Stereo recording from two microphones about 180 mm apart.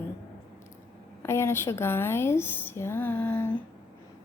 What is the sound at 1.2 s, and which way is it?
A woman's voice, 15° left (ahead or behind).